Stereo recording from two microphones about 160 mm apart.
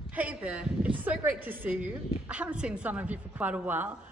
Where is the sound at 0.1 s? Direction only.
10° right (ahead or behind).